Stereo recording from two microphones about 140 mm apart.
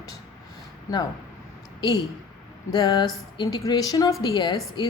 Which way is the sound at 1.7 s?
30° left (ahead or behind).